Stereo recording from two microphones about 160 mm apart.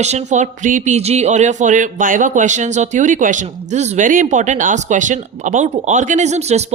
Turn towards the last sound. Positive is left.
turn(degrees=-45)  # may be behind; listen again after turning